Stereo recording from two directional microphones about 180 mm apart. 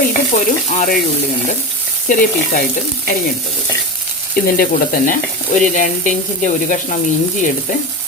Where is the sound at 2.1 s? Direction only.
50° left (ahead or behind).